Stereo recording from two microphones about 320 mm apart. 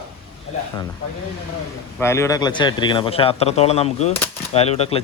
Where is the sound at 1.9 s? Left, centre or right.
Centre.